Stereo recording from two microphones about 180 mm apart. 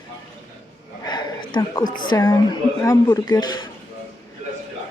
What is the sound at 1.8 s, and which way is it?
Speech, 50° left (ahead or behind).